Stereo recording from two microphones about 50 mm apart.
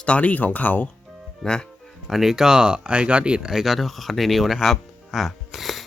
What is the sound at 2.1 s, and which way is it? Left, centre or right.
Speech, centre.